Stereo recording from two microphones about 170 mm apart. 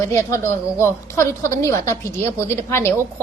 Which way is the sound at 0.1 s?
15° left (ahead or behind).